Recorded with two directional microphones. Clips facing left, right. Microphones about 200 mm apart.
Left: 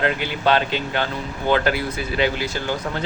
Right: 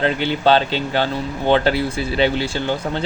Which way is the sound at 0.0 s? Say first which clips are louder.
Right 4 dB; 30° right (ahead or behind).